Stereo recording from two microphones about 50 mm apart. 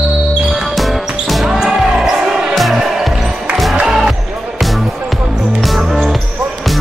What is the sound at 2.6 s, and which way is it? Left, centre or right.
Music, centre.